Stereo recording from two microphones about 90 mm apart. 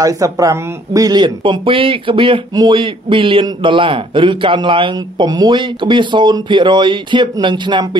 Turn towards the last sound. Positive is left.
turn(degrees=-60)  # may be behind; listen again after turning